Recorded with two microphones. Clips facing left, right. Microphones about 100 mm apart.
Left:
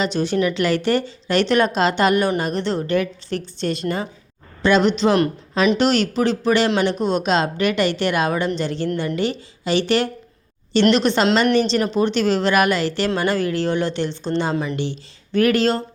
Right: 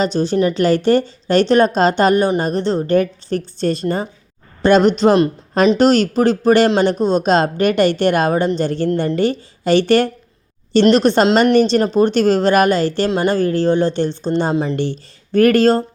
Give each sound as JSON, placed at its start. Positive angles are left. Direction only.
{"t": 0.0, "sound": "a woman's voice", "side_deg": -35}
{"t": 6.7, "sound": "a woman's voice", "side_deg": -35}
{"t": 14.5, "sound": "speech", "side_deg": -30}
{"t": 14.8, "sound": "speech", "side_deg": -45}